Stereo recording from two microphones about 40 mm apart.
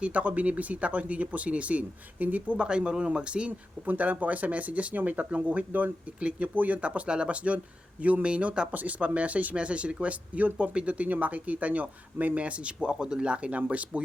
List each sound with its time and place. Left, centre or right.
0.0 s speech: right
2.6 s speech: right
3.8 s speech: right
6.1 s speech: right
6.5 s speech: right
6.8 s speech: right